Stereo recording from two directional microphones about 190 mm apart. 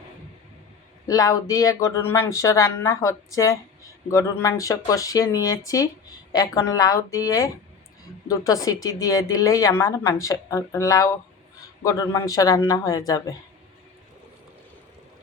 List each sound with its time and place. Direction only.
1.0 s a woman's voice: 20° left (ahead or behind)